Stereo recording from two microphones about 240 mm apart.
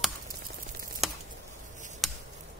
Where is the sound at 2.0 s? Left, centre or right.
Centre.